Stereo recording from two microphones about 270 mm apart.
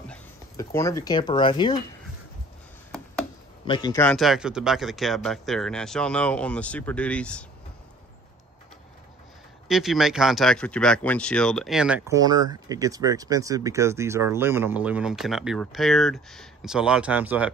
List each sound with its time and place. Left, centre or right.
0.7 s speech: centre
3.6 s speech: centre
9.7 s speech: centre